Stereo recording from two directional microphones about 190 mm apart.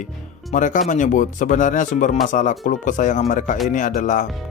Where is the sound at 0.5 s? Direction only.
40° left (ahead or behind).